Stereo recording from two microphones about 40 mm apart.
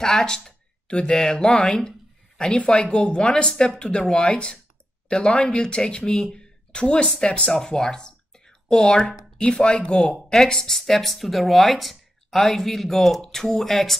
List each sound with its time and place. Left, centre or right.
0.0 s speech: centre
0.8 s speech: left
6.3 s a sound: left
7.2 s speech: left
10.3 s speech: centre